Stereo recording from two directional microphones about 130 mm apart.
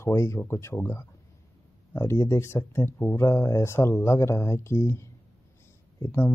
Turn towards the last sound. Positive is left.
turn(degrees=20)  # may be behind; listen again after turning